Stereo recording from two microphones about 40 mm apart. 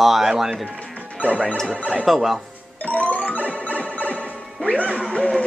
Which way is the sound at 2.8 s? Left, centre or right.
Left.